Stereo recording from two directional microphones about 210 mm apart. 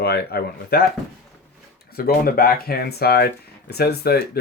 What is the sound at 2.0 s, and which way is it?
Speech, 45° left (ahead or behind).